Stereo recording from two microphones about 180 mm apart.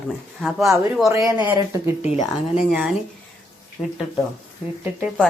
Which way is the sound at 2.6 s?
5° right (ahead or behind).